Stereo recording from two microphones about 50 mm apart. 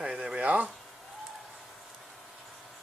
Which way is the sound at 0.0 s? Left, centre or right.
Right.